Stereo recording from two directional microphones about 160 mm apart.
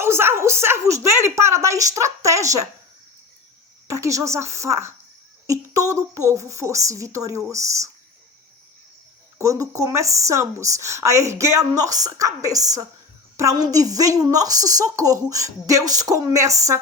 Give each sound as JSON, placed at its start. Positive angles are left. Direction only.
{"t": 0.0, "sound": "a woman's voice", "side_deg": -15}
{"t": 3.8, "sound": "a woman's voice", "side_deg": -20}
{"t": 9.4, "sound": "a woman's voice", "side_deg": -20}